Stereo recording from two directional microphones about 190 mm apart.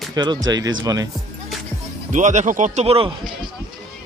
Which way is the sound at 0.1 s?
20° right (ahead or behind).